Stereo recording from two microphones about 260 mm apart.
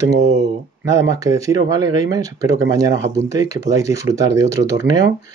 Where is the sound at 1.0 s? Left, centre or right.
Centre.